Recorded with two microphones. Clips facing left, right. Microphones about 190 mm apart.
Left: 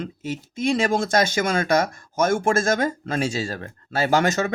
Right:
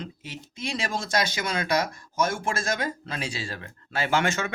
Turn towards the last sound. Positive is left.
turn(degrees=40)  # may be behind; listen again after turning